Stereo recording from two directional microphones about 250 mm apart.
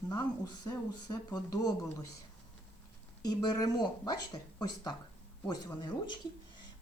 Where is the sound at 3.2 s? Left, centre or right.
Centre.